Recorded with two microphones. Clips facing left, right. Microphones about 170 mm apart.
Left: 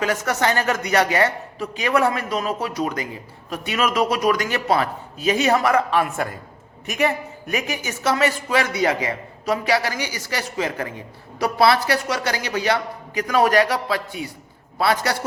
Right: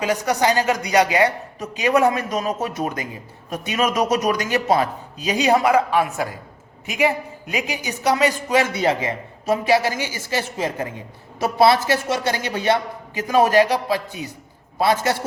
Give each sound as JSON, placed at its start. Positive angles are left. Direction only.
{"t": 0.0, "sound": "a woman's voice", "side_deg": -15}